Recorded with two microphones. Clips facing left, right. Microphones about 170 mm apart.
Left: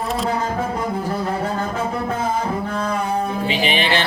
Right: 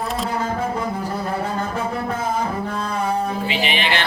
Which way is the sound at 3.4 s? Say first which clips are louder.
Left 2 dB; 35° left (ahead or behind).